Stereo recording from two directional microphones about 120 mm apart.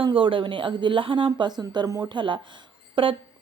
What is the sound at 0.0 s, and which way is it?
Speech, 45° right (ahead or behind).